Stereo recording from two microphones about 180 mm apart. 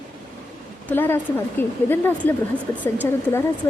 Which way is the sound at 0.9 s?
10° left (ahead or behind).